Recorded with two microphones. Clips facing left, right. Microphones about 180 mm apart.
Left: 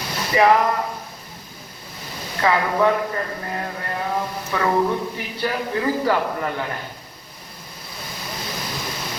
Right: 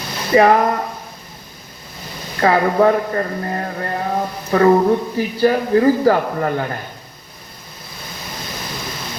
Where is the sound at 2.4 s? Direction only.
40° right (ahead or behind).